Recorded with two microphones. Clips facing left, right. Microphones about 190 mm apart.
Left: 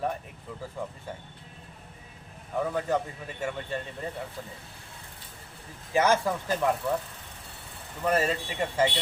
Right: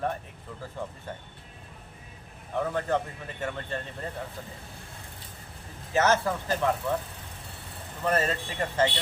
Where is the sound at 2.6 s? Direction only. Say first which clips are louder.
Even; 10° left (ahead or behind).